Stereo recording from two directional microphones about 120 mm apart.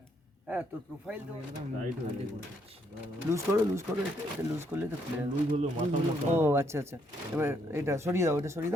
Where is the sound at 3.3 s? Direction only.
20° right (ahead or behind).